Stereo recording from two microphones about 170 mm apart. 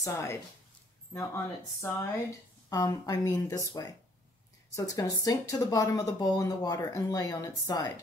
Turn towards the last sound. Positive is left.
turn(degrees=20)  # may be behind; listen again after turning